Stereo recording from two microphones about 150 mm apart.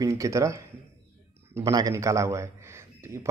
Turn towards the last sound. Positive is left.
turn(degrees=-15)  # may be behind; listen again after turning